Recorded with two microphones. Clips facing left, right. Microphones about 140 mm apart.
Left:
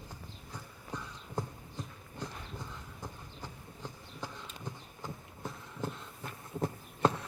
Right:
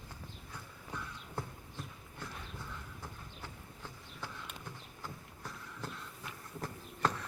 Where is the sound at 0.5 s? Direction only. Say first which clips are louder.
Left 3 dB; 15° left (ahead or behind).